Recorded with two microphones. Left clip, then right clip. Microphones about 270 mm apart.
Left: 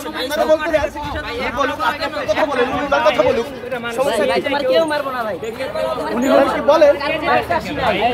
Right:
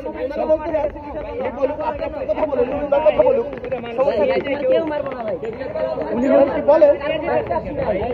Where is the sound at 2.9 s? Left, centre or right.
Left.